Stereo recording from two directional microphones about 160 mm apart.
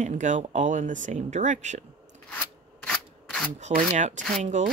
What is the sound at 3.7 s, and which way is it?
Speech, 50° right (ahead or behind).